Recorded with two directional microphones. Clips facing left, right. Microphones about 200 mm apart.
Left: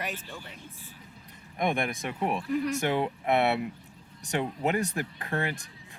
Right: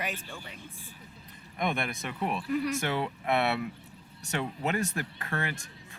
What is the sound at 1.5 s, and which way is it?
Speech, 15° left (ahead or behind).